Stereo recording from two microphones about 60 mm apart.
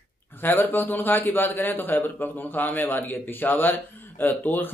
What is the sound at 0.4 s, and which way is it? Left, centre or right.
Speech, left.